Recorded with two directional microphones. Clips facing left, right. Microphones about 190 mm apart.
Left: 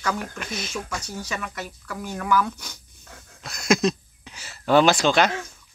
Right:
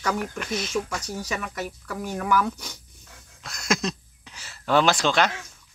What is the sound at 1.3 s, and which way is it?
Speech, 20° right (ahead or behind).